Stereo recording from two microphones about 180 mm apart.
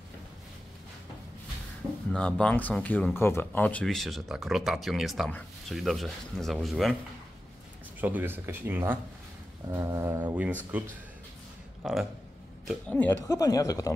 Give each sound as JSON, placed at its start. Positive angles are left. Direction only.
{"t": 2.1, "sound": "speech", "side_deg": 5}
{"t": 8.0, "sound": "speech", "side_deg": -10}
{"t": 13.2, "sound": "speech", "side_deg": 20}